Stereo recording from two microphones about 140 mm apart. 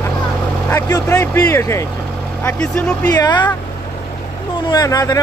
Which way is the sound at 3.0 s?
30° left (ahead or behind).